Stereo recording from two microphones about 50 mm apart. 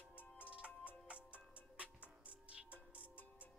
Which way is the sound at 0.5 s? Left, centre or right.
Right.